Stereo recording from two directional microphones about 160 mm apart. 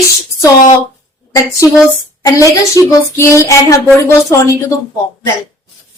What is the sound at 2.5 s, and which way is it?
Speech, 20° left (ahead or behind).